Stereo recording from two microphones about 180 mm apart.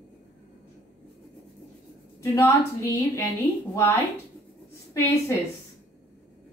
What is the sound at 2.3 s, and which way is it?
A woman's voice, 15° left (ahead or behind).